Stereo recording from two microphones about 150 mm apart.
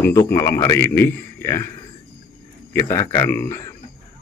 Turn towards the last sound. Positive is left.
turn(degrees=15)  # may be behind; listen again after turning